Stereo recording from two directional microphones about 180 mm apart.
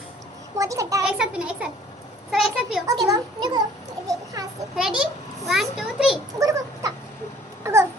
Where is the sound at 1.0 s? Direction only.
5° right (ahead or behind).